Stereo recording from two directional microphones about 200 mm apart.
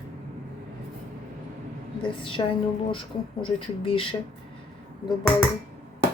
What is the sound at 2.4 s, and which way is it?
Speech, 25° left (ahead or behind).